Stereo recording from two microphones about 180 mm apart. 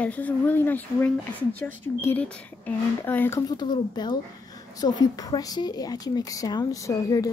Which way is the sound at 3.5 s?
25° left (ahead or behind).